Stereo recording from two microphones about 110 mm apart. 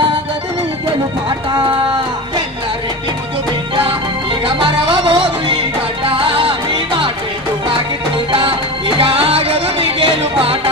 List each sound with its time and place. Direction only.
4.4 s music: 50° right (ahead or behind)
8.3 s music: 55° right (ahead or behind)